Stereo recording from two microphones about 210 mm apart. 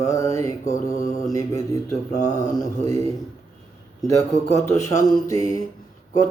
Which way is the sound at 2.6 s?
15° left (ahead or behind).